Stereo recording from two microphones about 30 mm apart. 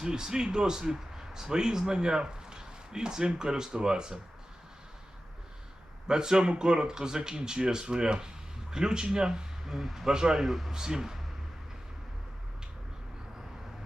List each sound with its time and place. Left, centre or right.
0.0 s speech: right
6.1 s speech: right
9.6 s speech: centre
10.1 s speech: right
10.4 s speech: centre
10.7 s speech: right